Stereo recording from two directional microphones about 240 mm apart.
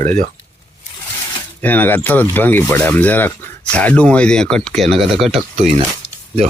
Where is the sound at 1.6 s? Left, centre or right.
Centre.